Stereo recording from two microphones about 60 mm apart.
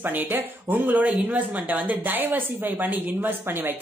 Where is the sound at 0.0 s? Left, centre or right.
Right.